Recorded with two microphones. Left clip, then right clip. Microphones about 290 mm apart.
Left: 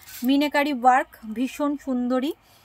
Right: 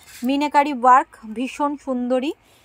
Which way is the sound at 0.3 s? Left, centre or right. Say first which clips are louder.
Right 4 dB; centre.